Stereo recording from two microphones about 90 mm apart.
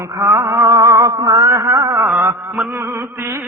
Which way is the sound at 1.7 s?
45° right (ahead or behind).